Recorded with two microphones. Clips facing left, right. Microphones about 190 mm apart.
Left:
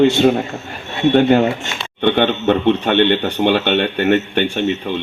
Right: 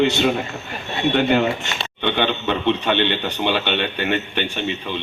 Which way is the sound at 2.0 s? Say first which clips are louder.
Left 7 dB; 55° left (ahead or behind).